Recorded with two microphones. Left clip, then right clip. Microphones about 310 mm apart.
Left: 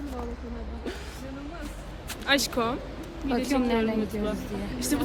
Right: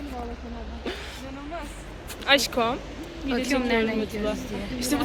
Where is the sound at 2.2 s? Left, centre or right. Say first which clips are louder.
Right 4 dB; centre.